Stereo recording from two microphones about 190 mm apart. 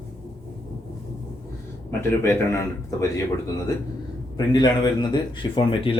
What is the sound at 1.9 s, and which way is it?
Speech, 15° left (ahead or behind).